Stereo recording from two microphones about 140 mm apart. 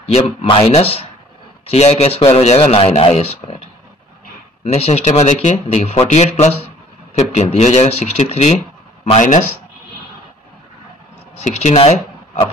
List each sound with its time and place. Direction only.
0.0 s speech: 45° left (ahead or behind)
4.6 s speech: 45° left (ahead or behind)
11.4 s speech: 50° left (ahead or behind)